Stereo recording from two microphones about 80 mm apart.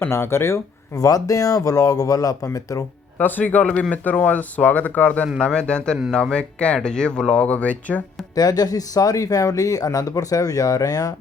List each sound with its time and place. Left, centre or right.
0.1 s speech: left
0.9 s speech: left
3.2 s speech: left
8.4 s speech: left